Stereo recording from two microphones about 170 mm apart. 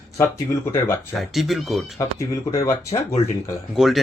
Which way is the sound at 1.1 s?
Centre (ahead or behind).